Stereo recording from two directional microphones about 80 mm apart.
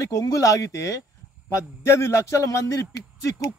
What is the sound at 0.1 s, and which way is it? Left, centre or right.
A man's voice, left.